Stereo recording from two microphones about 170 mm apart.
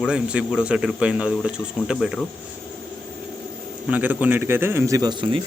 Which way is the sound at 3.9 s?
10° right (ahead or behind).